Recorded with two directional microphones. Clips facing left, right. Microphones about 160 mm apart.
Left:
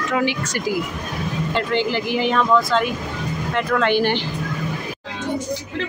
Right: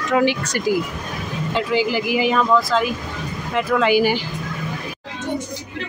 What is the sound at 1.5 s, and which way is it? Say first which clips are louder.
Speech: right 2 dB; 5° right (ahead or behind).